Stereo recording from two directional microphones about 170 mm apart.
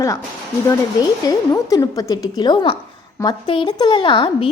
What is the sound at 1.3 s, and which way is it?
A woman's voice, 20° left (ahead or behind).